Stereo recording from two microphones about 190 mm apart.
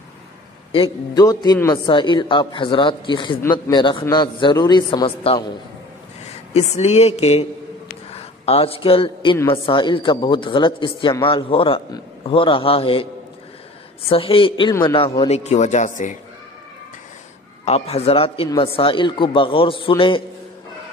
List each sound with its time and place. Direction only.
0.7 s a man's voice: 30° left (ahead or behind)
17.6 s a man's voice: 35° left (ahead or behind)